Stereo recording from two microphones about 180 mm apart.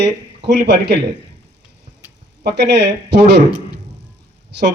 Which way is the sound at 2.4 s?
70° right (ahead or behind).